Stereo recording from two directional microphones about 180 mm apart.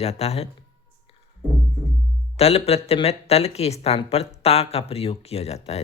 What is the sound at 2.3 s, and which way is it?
Speech, 35° left (ahead or behind).